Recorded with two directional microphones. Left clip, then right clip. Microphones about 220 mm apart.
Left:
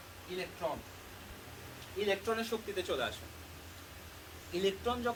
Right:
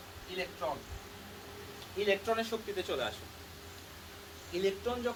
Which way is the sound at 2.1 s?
10° left (ahead or behind).